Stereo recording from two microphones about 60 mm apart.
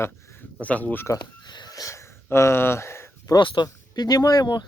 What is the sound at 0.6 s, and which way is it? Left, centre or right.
Speech, left.